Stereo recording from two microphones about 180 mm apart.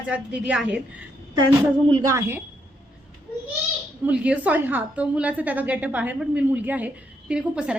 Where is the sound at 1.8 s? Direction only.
25° right (ahead or behind).